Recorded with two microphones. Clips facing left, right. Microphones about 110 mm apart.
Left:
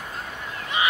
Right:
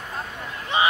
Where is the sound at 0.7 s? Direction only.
30° right (ahead or behind).